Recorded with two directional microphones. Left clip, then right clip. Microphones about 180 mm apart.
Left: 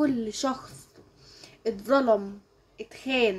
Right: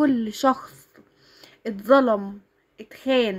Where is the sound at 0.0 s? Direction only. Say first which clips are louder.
Right 6 dB; 50° right (ahead or behind).